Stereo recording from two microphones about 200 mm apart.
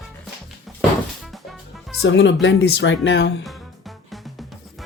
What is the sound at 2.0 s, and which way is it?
Speech, 65° left (ahead or behind).